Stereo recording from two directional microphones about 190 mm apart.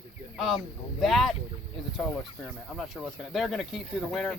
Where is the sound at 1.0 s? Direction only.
Centre (ahead or behind).